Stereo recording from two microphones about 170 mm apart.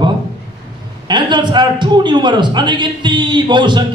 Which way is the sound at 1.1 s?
25° right (ahead or behind).